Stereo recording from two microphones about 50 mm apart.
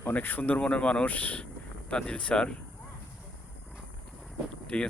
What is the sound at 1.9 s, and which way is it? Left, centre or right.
Speech, left.